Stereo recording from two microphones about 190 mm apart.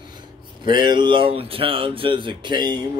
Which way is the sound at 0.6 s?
25° right (ahead or behind).